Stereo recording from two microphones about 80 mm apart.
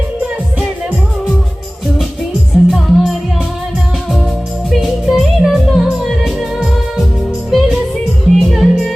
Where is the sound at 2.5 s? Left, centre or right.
Centre.